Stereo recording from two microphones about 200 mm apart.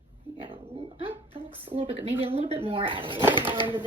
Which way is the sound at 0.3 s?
25° right (ahead or behind).